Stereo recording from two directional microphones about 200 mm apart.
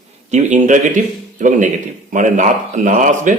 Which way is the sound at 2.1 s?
40° right (ahead or behind).